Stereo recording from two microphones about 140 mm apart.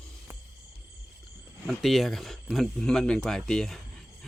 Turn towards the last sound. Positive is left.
turn(degrees=5)  # may be behind; listen again after turning